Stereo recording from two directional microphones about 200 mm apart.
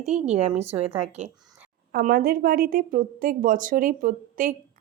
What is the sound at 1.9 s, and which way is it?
A woman's voice, 50° right (ahead or behind).